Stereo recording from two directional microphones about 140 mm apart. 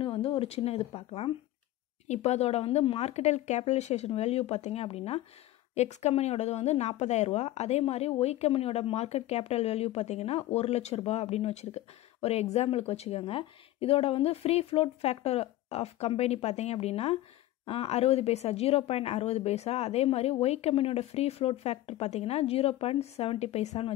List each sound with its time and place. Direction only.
0.0 s speech: 40° left (ahead or behind)